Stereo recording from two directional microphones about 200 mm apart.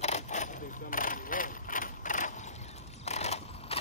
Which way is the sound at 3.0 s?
35° left (ahead or behind).